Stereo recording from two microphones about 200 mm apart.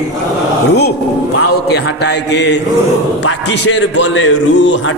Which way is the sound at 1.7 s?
55° left (ahead or behind).